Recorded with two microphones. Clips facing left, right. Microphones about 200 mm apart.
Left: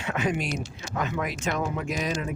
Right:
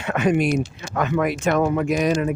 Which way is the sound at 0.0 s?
60° right (ahead or behind).